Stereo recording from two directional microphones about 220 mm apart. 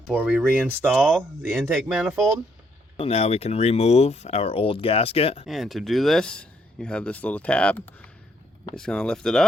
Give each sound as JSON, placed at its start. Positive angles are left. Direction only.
{"t": 0.1, "sound": "speech", "side_deg": -5}
{"t": 3.0, "sound": "speech", "side_deg": 25}
{"t": 5.5, "sound": "speech", "side_deg": 0}